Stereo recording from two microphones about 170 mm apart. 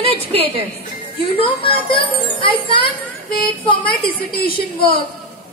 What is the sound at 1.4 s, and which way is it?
Speech, 30° left (ahead or behind).